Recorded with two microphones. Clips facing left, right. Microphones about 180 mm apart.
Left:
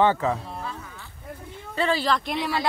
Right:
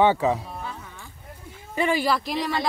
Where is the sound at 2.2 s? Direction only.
Centre (ahead or behind).